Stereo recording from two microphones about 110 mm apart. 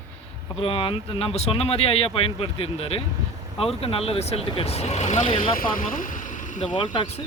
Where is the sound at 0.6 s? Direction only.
55° left (ahead or behind); by 5.2 s 90° left.